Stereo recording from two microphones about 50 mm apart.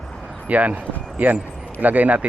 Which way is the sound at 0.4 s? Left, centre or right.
Right.